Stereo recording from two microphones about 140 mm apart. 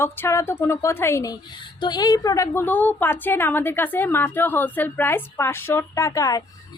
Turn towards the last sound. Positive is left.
turn(degrees=25)  # may be behind; listen again after turning